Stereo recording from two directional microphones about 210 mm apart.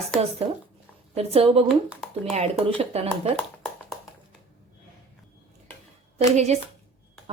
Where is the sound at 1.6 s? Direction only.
Centre (ahead or behind).